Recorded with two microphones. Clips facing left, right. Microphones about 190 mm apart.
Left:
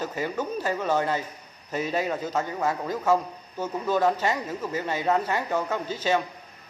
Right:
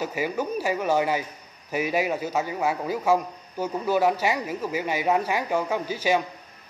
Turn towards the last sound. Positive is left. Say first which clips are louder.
# right 2 dB
turn(degrees=-10)  # may be behind; listen again after turning